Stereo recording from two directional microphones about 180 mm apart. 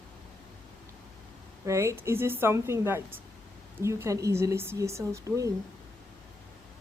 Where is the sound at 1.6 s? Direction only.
15° right (ahead or behind).